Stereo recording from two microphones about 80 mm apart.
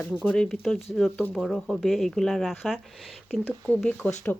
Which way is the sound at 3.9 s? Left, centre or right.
Centre.